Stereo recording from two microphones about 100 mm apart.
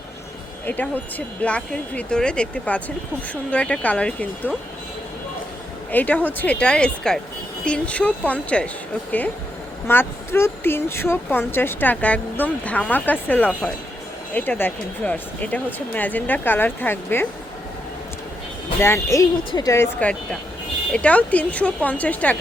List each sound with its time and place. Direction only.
0.6 s speech: 20° left (ahead or behind)
5.9 s speech: 15° left (ahead or behind)
9.8 s speech: 25° left (ahead or behind)
18.8 s speech: 25° left (ahead or behind)
20.9 s speech: 15° left (ahead or behind)